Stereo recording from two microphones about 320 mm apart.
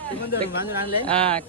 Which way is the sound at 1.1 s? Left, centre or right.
Centre.